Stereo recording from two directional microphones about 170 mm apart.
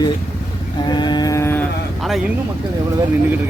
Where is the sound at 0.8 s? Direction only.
25° left (ahead or behind).